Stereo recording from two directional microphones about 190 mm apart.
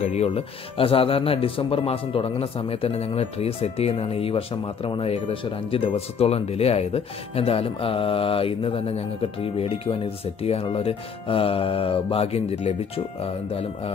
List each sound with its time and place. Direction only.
0.0 s speech: 35° left (ahead or behind)